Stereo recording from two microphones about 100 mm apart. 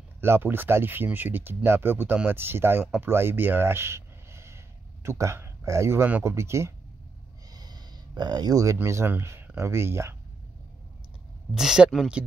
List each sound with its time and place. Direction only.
0.2 s speech: 25° right (ahead or behind)
7.5 s a sound: 45° right (ahead or behind)
8.7 s speech: 25° right (ahead or behind)
11.5 s speech: 5° right (ahead or behind)